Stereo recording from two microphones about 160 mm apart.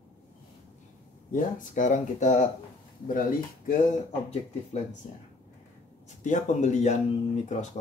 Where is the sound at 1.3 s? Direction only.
55° left (ahead or behind).